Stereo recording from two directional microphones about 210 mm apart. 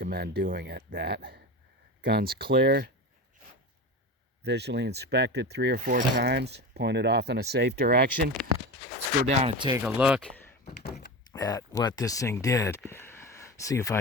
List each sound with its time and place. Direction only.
0.0 s speech: 45° right (ahead or behind)
4.4 s speech: 50° right (ahead or behind)
9.3 s speech: 30° right (ahead or behind)
9.8 s speech: 5° right (ahead or behind)
10.8 s door: 50° left (ahead or behind)
11.3 s speech: 20° left (ahead or behind)